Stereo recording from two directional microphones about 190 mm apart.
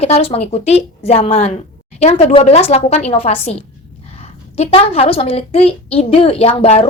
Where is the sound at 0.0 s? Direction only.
30° left (ahead or behind).